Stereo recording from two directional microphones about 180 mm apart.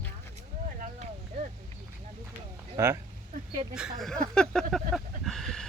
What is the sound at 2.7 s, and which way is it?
Speech, 15° right (ahead or behind).